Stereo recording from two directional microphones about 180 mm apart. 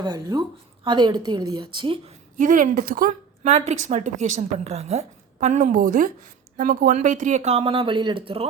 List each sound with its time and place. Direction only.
0.0 s a woman's voice: 20° right (ahead or behind)
2.4 s a woman's voice: 45° right (ahead or behind)